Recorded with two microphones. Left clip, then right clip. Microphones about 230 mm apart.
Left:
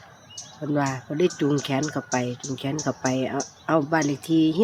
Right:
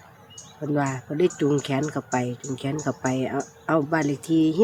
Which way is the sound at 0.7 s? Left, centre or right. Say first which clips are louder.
Even; centre.